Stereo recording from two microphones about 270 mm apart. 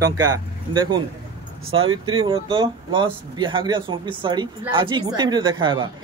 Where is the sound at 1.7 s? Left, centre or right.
Centre.